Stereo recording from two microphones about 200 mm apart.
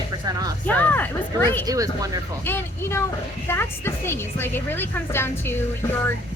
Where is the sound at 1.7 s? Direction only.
15° right (ahead or behind).